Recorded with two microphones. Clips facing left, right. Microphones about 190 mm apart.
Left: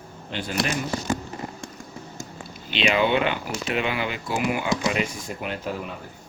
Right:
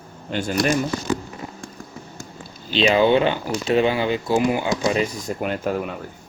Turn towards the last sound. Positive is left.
turn(degrees=-50)  # may be behind; listen again after turning